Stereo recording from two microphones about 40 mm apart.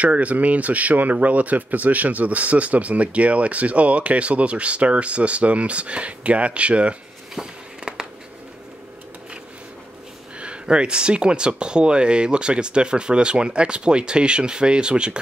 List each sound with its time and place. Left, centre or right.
0.0 s speech: right
7.3 s a sound: right
10.4 s speech: right